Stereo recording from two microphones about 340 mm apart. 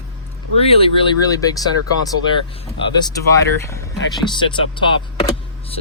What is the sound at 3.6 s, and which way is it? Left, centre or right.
Speech, centre.